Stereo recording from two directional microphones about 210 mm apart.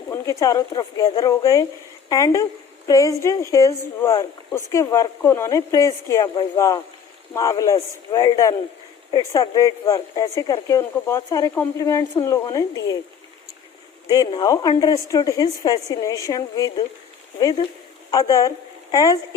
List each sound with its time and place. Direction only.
0.1 s a woman's voice: 15° left (ahead or behind)
14.1 s a woman's voice: 20° left (ahead or behind)
18.1 s speech: 15° left (ahead or behind)